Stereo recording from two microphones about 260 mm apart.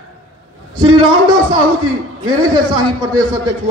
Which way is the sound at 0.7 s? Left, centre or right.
Right.